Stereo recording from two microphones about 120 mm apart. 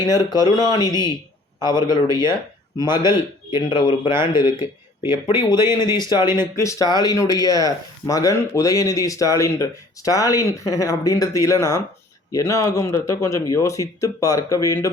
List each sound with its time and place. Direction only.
0.3 s a man's voice: 35° left (ahead or behind)